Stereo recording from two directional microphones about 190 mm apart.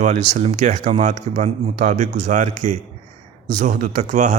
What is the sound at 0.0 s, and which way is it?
Speech, 40° right (ahead or behind).